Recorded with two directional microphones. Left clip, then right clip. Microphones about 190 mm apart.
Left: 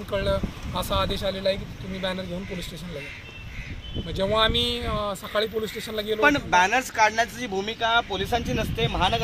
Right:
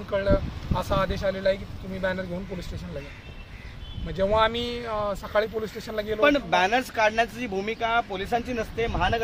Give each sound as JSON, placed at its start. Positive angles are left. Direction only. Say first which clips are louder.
{"t": 0.1, "sound": "speech", "louder": "right 2 dB", "side_deg": 0}
{"t": 4.1, "sound": "speech", "louder": "even", "side_deg": -5}
{"t": 6.2, "sound": "speech", "louder": "left 1 dB", "side_deg": -45}
{"t": 8.7, "sound": "speech", "louder": "left 1 dB", "side_deg": -5}